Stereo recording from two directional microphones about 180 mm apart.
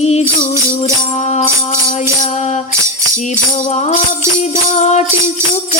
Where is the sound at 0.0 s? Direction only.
35° left (ahead or behind).